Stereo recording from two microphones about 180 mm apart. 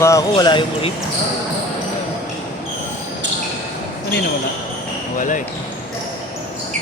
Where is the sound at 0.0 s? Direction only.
20° left (ahead or behind).